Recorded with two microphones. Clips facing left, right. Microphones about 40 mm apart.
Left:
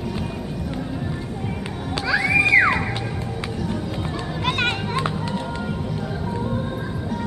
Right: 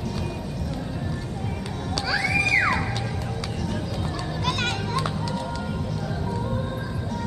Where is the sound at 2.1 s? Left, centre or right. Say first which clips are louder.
Left 6 dB; left.